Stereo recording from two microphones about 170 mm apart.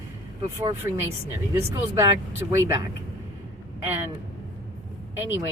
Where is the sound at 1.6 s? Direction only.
15° right (ahead or behind).